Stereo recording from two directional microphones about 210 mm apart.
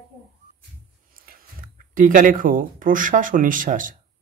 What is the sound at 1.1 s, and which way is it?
A man's voice, 45° right (ahead or behind).